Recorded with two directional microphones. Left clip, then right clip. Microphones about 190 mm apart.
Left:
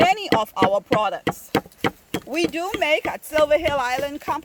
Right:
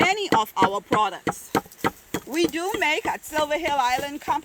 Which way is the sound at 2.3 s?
40° left (ahead or behind).